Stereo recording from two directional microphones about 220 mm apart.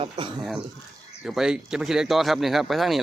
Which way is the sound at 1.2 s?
Centre (ahead or behind).